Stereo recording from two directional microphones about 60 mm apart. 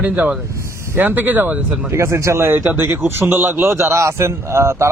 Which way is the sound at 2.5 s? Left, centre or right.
Right.